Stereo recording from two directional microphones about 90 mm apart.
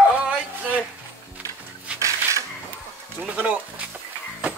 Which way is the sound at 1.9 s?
15° right (ahead or behind).